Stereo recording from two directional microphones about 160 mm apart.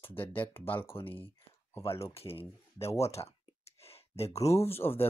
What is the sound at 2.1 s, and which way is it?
Speech, 35° left (ahead or behind).